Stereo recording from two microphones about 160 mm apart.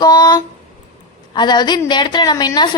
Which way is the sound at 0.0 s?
25° left (ahead or behind).